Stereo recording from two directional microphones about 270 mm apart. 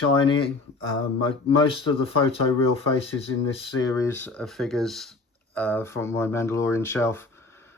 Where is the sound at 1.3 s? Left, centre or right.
Centre.